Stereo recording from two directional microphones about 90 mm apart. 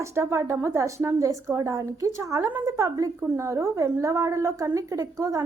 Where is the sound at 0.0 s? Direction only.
30° right (ahead or behind).